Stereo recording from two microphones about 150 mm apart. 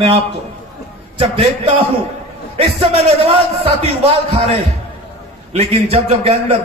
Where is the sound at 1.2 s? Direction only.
40° right (ahead or behind).